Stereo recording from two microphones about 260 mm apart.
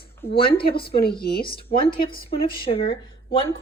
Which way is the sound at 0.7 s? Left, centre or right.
Left.